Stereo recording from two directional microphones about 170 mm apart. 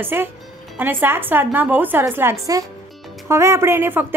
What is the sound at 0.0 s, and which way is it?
A woman's voice, 10° right (ahead or behind).